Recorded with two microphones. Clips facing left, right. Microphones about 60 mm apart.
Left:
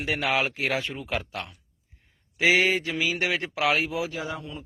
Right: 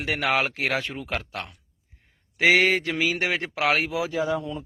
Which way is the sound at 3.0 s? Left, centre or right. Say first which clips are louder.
Right 2 dB; right.